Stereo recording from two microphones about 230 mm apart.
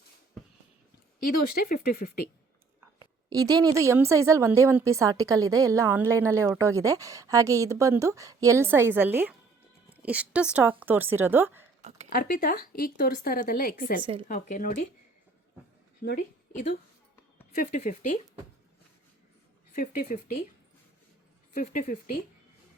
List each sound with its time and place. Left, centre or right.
1.3 s speech: left
3.0 s a woman's voice: centre
11.8 s a sound: right
12.1 s speech: left
14.0 s speech: right
14.3 s speech: left
16.0 s a woman's voice: left
19.7 s speech: left
21.5 s speech: left